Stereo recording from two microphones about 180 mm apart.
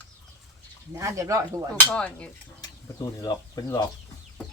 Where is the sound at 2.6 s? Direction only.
20° left (ahead or behind).